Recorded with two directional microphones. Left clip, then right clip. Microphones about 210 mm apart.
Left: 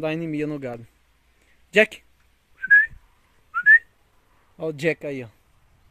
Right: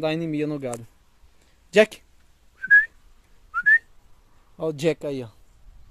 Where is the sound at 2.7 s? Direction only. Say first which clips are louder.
Left 1 dB; 10° right (ahead or behind).